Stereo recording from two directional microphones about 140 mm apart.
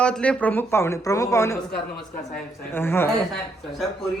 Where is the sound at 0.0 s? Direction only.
10° left (ahead or behind).